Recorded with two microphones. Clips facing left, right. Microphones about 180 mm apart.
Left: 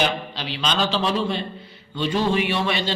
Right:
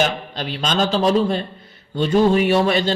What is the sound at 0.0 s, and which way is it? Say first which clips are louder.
A man's voice: right 3 dB; 45° right (ahead or behind).